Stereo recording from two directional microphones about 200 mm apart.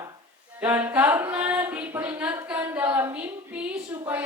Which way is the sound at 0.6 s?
10° right (ahead or behind).